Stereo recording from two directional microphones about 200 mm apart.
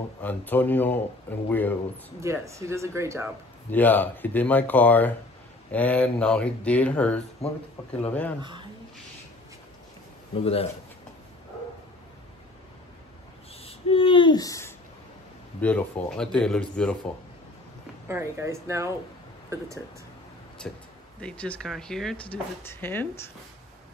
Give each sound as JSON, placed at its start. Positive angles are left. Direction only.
{"t": 0.2, "sound": "speech", "side_deg": 10}
{"t": 2.1, "sound": "speech", "side_deg": -15}
{"t": 3.7, "sound": "speech", "side_deg": 10}
{"t": 8.4, "sound": "speech", "side_deg": -25}
{"t": 10.3, "sound": "speech", "side_deg": 30}
{"t": 13.7, "sound": "a sound", "side_deg": 25}
{"t": 15.6, "sound": "speech", "side_deg": 5}
{"t": 18.0, "sound": "speech", "side_deg": -15}
{"t": 20.6, "sound": "speech", "side_deg": 5}